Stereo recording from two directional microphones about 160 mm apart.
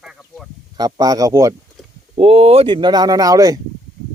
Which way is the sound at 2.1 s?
35° right (ahead or behind).